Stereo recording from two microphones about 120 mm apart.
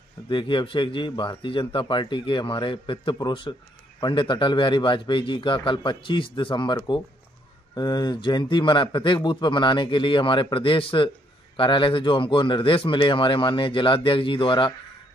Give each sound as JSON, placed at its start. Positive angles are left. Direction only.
{"t": 0.3, "sound": "a man's voice", "side_deg": 45}